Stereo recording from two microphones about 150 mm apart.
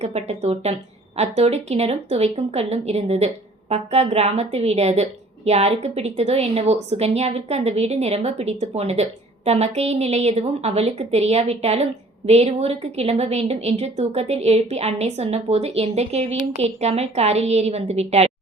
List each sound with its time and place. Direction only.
0.0 s a woman's voice: 45° right (ahead or behind)